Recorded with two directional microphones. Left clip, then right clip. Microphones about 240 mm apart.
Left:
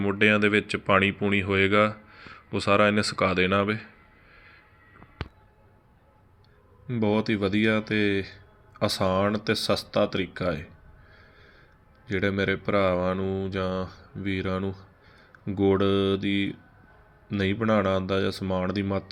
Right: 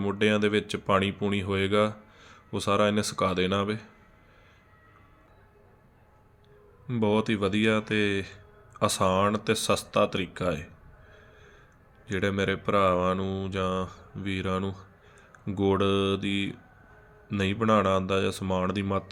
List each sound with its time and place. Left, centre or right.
0.0 s speech: centre
6.8 s speech: centre
12.0 s speech: centre